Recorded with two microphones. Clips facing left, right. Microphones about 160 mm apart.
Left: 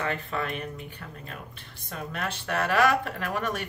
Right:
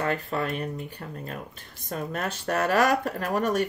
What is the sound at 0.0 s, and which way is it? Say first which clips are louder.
Speech: right 3 dB; 40° right (ahead or behind).